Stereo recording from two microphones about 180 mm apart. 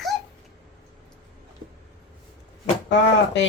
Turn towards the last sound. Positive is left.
turn(degrees=80)